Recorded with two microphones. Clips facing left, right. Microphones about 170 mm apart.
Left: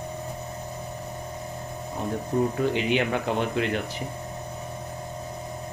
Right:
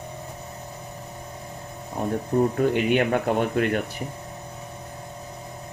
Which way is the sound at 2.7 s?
50° right (ahead or behind).